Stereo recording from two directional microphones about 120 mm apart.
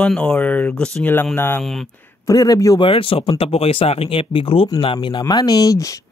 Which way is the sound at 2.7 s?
50° left (ahead or behind).